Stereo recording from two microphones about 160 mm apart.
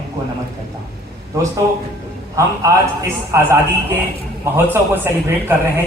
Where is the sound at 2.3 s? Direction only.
20° right (ahead or behind).